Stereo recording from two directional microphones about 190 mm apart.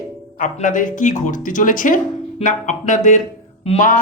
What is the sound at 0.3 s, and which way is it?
A man's voice, 45° left (ahead or behind).